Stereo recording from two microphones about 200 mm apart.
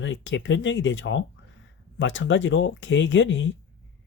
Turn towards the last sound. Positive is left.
turn(degrees=65)  # may be behind; listen again after turning